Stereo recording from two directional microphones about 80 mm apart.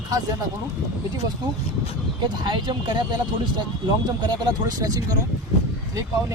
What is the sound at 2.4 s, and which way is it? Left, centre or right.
Speech, right.